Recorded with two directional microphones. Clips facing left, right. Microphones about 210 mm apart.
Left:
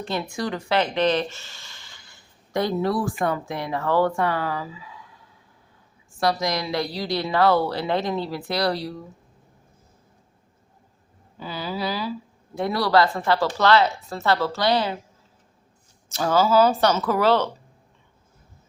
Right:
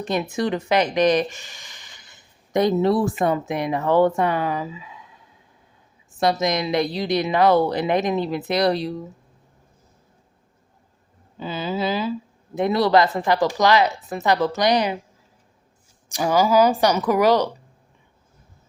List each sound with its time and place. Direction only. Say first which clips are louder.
0.0 s a woman's voice: right 4 dB; 20° right (ahead or behind)
11.3 s a woman's voice: right 4 dB; 20° right (ahead or behind)
16.0 s speech: right 1 dB; 15° right (ahead or behind)